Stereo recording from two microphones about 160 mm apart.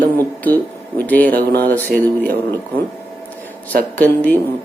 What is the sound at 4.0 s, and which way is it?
Speech, 10° left (ahead or behind).